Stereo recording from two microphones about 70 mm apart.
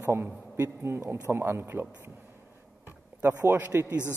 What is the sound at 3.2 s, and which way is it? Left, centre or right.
Speech, right.